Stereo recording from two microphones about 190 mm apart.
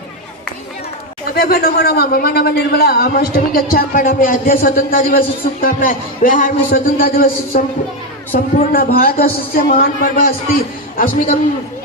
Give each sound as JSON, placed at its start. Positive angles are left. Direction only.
{"t": 1.4, "sound": "a man's voice", "side_deg": 55}